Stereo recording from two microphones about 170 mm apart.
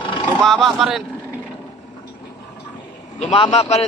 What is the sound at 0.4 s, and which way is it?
Speech, centre (ahead or behind).